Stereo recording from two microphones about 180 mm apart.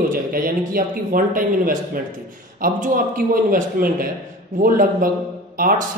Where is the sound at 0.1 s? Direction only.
50° right (ahead or behind).